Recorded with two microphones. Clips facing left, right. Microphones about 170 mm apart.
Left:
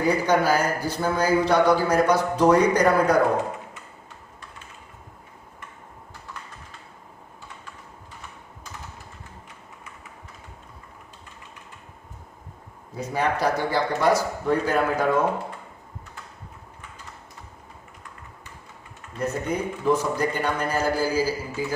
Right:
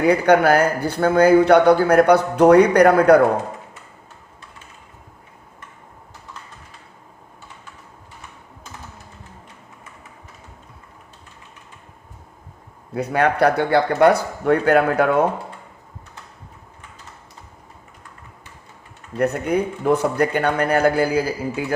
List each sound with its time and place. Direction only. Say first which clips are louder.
0.0 s a man's voice: right 6 dB; 60° right (ahead or behind)
12.9 s a man's voice: right 6 dB; 65° right (ahead or behind)
19.2 s a man's voice: right 7 dB; 65° right (ahead or behind)